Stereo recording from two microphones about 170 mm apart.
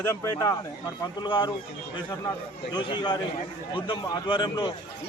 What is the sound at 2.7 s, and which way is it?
A man's voice, 25° left (ahead or behind).